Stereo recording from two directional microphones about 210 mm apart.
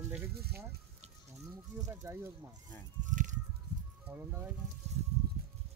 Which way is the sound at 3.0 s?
35° right (ahead or behind).